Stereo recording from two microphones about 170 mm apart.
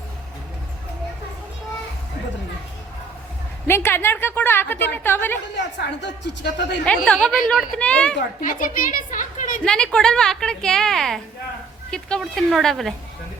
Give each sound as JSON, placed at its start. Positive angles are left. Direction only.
{"t": 3.7, "sound": "a woman's voice", "side_deg": 15}
{"t": 5.5, "sound": "a woman's voice", "side_deg": 90}
{"t": 6.8, "sound": "a woman's voice", "side_deg": 5}
{"t": 8.4, "sound": "a woman's voice", "side_deg": 50}
{"t": 9.6, "sound": "a woman's voice", "side_deg": 5}